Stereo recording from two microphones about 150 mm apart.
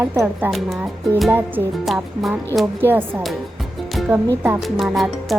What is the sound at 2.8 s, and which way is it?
Speech, 15° right (ahead or behind).